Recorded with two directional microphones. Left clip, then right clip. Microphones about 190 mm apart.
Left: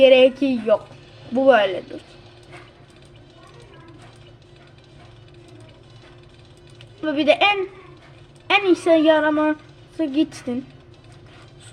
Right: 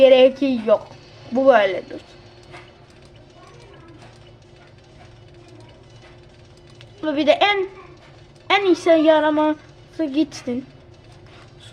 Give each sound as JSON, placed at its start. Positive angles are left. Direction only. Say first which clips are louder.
{"t": 0.0, "sound": "a woman's voice", "louder": "right 1 dB", "side_deg": 10}
{"t": 7.0, "sound": "a woman's voice", "louder": "even", "side_deg": 5}